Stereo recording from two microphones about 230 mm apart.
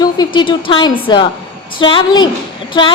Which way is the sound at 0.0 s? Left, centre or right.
Centre.